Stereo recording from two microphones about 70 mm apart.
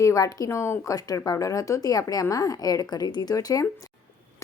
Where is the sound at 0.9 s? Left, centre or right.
Left.